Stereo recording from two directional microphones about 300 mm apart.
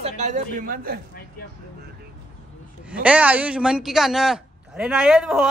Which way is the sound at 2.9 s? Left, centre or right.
Centre.